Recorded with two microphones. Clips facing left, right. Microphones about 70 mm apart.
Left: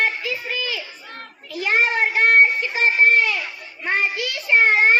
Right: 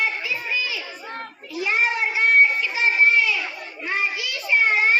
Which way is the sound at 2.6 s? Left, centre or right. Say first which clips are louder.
Left 2 dB; left.